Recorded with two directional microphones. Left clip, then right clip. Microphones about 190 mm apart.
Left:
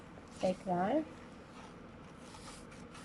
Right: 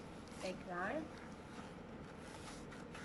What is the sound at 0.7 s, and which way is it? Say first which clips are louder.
Speech: left 7 dB; 35° left (ahead or behind).